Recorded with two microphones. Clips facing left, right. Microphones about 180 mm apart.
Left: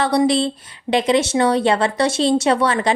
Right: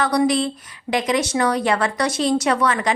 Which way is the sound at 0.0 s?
30° left (ahead or behind).